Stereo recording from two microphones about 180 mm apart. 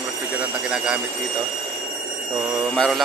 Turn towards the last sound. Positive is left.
turn(degrees=5)  # may be behind; listen again after turning